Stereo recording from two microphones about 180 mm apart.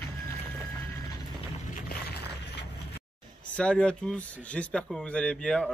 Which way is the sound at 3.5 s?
5° left (ahead or behind).